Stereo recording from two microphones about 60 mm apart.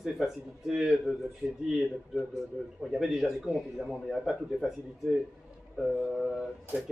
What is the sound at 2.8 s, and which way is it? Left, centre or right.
A man's voice, centre.